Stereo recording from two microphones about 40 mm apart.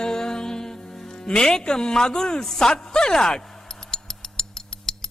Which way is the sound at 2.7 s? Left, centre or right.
Centre.